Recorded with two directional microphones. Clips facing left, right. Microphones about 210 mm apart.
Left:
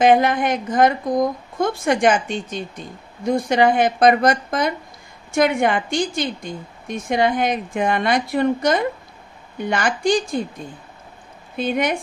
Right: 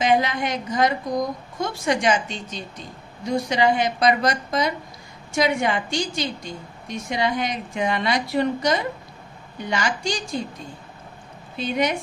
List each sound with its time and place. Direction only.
0.0 s a woman's voice: 50° left (ahead or behind)
11.5 s a woman's voice: 55° left (ahead or behind)